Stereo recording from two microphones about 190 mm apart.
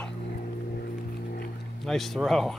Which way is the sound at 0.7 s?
60° left (ahead or behind).